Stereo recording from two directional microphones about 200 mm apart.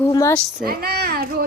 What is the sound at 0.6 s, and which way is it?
Speech, 50° right (ahead or behind).